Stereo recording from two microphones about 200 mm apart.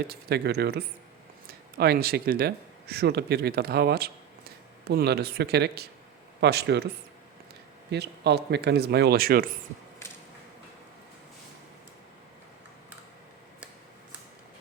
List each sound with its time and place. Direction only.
0.1 s speech: 55° right (ahead or behind)
7.9 s speech: 55° right (ahead or behind)